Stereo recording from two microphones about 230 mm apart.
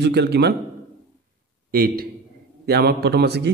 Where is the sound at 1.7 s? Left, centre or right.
Right.